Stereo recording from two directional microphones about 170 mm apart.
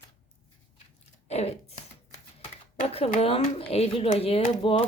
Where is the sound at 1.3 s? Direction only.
40° left (ahead or behind).